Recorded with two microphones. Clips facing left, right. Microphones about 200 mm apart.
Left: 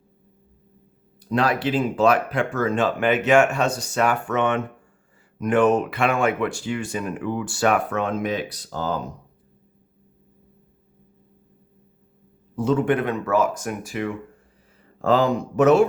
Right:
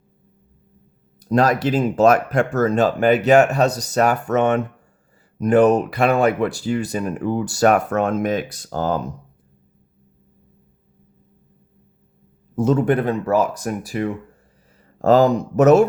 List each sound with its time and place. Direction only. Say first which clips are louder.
1.2 s speech: right 4 dB; 40° right (ahead or behind)
12.5 s speech: right 3 dB; 40° right (ahead or behind)